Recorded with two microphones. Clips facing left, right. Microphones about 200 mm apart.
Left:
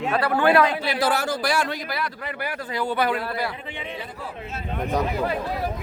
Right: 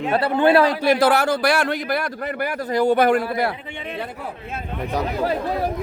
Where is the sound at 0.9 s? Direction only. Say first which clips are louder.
Right 6 dB; 65° right (ahead or behind); by 3.2 s 45° right (ahead or behind).